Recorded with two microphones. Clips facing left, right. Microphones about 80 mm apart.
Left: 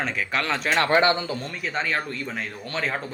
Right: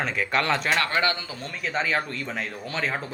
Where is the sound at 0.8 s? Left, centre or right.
Left.